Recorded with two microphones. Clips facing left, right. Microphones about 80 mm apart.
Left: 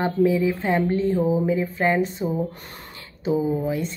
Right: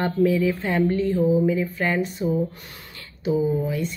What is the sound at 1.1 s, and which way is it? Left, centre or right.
A woman's voice, left.